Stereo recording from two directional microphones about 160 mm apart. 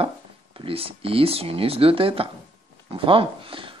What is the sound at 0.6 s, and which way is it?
Speech, 35° right (ahead or behind).